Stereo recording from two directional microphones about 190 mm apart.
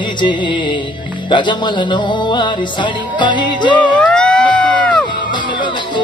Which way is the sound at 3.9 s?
5° left (ahead or behind).